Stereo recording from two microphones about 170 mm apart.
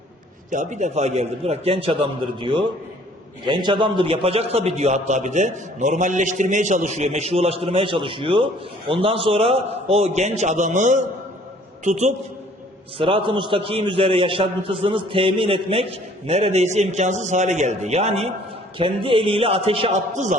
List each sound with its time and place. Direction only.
0.5 s a man's voice: 45° right (ahead or behind)
13.0 s a man's voice: 30° right (ahead or behind)